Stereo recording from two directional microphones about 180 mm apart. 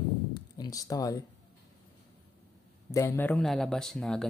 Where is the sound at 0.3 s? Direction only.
20° left (ahead or behind).